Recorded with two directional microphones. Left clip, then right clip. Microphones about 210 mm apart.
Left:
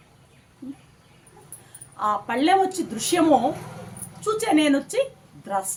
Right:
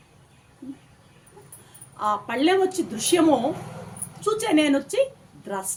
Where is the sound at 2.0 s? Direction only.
5° left (ahead or behind).